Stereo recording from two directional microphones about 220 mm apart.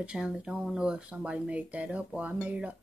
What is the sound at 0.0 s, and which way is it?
Speech, 5° right (ahead or behind).